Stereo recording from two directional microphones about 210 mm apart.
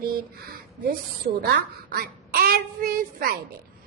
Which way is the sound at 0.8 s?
45° right (ahead or behind).